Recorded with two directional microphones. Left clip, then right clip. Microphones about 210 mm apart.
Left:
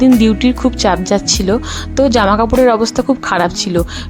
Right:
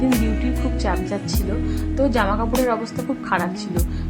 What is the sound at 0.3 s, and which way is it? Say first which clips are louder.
Speech: left 11 dB; 45° left (ahead or behind).